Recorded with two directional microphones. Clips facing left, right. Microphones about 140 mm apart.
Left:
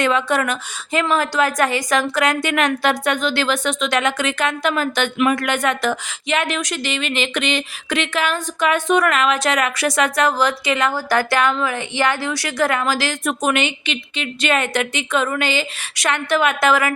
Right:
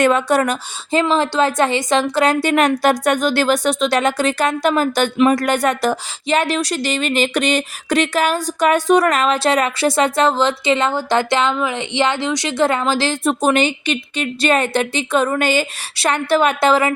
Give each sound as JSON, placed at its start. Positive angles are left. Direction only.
{"t": 0.0, "sound": "a woman's voice", "side_deg": -45}